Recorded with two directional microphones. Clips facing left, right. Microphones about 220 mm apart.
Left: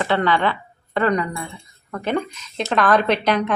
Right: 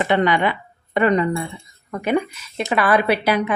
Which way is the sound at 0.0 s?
15° right (ahead or behind).